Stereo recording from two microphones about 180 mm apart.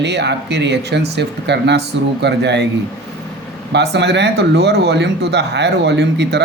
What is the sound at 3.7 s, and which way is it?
Speech, 70° right (ahead or behind).